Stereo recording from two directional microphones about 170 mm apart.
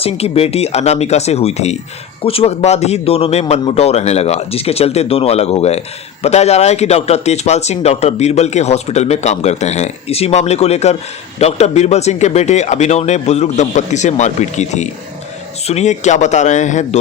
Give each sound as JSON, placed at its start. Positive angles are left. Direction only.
{"t": 0.0, "sound": "speech", "side_deg": 35}